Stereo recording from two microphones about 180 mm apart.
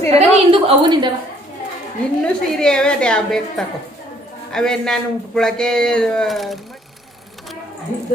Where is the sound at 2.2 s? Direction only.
5° left (ahead or behind).